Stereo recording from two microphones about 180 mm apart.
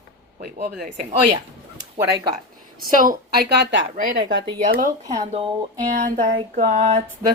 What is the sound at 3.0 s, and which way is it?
Speech, 50° right (ahead or behind).